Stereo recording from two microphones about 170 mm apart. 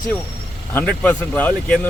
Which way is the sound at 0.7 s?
10° left (ahead or behind).